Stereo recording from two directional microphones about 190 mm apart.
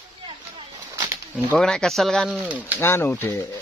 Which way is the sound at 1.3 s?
5° left (ahead or behind).